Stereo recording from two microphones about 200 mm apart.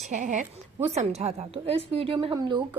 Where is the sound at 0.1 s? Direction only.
40° right (ahead or behind).